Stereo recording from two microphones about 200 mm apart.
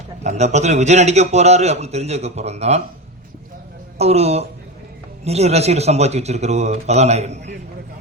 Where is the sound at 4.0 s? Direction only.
30° right (ahead or behind).